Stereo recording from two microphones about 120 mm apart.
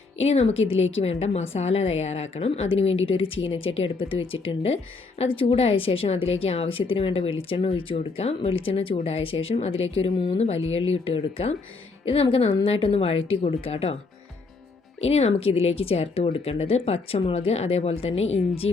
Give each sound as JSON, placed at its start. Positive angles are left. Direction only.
{"t": 0.2, "sound": "speech", "side_deg": 60}
{"t": 15.0, "sound": "speech", "side_deg": 60}